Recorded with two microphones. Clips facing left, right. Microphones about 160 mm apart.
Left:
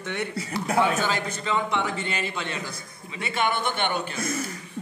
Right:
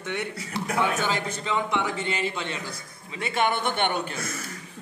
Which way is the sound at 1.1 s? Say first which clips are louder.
Left 1 dB; 20° right (ahead or behind).